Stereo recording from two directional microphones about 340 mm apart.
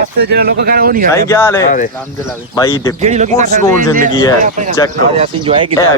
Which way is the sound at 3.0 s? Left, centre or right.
Centre.